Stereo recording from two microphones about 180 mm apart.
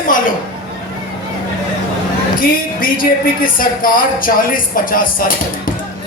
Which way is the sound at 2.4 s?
50° left (ahead or behind).